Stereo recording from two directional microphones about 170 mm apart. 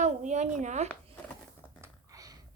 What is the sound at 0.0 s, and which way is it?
Speech, 45° right (ahead or behind).